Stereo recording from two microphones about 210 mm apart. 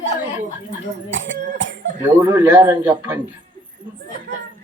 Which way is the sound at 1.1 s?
60° right (ahead or behind).